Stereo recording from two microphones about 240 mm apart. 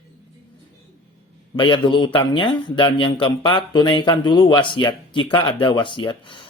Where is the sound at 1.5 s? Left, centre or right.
Centre.